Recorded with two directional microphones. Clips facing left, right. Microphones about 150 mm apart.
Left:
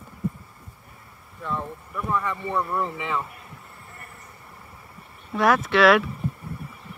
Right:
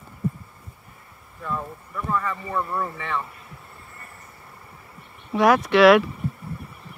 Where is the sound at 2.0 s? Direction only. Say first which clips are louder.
Even; 10° left (ahead or behind).